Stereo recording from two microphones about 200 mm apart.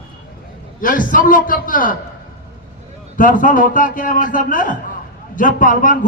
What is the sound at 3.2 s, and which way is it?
A man's voice, 40° left (ahead or behind).